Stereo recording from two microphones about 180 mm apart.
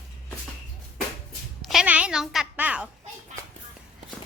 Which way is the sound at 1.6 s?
5° right (ahead or behind).